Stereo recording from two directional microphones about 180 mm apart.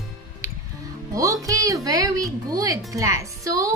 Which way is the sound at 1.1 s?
20° right (ahead or behind).